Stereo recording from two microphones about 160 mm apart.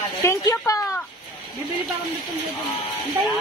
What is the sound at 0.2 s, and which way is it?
Speech, 20° left (ahead or behind).